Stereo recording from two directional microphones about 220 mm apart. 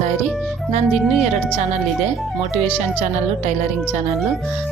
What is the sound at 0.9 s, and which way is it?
Speech, 5° right (ahead or behind).